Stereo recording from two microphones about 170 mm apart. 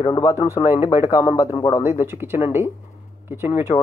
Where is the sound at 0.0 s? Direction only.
25° left (ahead or behind).